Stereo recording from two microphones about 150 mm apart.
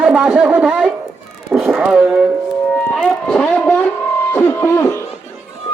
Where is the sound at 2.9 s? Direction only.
Centre (ahead or behind); by 5.0 s 20° left (ahead or behind).